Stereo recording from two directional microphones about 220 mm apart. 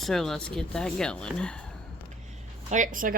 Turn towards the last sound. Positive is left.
turn(degrees=-40)  # may be behind; listen again after turning